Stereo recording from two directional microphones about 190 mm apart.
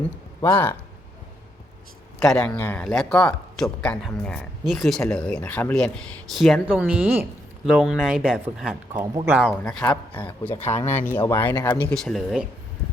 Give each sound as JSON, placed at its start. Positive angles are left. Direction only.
{"t": 0.4, "sound": "speech", "side_deg": 15}
{"t": 2.1, "sound": "speech", "side_deg": 5}
{"t": 10.8, "sound": "speech", "side_deg": 40}
{"t": 11.3, "sound": "speech", "side_deg": 10}